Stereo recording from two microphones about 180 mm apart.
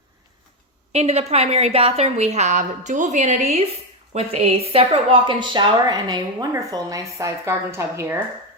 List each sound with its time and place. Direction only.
0.9 s a woman's voice: 35° right (ahead or behind); by 8.2 s 15° right (ahead or behind)